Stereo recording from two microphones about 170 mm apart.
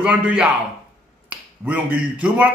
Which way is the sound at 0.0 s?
5° right (ahead or behind).